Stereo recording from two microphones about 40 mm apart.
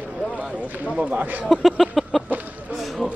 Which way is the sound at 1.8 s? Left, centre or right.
Centre.